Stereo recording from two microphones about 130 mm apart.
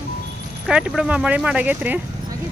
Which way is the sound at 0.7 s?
5° right (ahead or behind).